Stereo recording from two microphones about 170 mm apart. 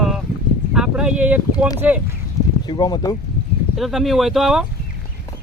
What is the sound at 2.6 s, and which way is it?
Speech, 25° left (ahead or behind).